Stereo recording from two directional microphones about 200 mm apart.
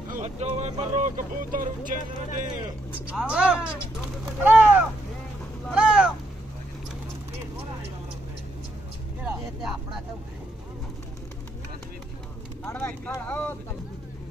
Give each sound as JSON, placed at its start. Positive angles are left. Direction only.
{"t": 0.1, "sound": "speech", "side_deg": -35}
{"t": 3.2, "sound": "speech", "side_deg": -5}
{"t": 9.2, "sound": "speech", "side_deg": -5}
{"t": 12.6, "sound": "speech", "side_deg": 10}